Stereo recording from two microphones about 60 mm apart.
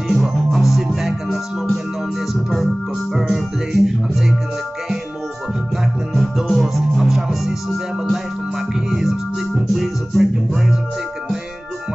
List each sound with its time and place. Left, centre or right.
0.1 s music: centre
3.2 s music: centre
6.1 s music: centre